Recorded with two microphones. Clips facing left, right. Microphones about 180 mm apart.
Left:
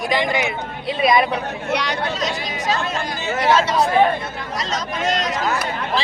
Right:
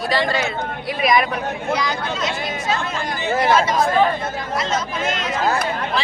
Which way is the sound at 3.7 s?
70° left (ahead or behind).